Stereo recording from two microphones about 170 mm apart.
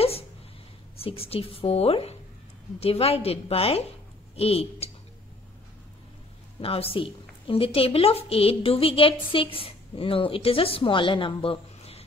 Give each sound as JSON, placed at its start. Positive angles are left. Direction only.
{"t": 1.0, "sound": "a woman's voice", "side_deg": 35}
{"t": 6.6, "sound": "a woman's voice", "side_deg": 35}